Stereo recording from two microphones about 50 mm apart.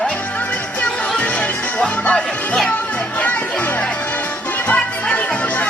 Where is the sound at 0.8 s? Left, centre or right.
Left.